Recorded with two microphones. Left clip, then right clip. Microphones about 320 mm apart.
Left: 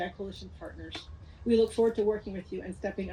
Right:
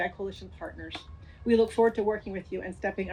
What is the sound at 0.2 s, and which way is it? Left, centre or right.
Speech, centre.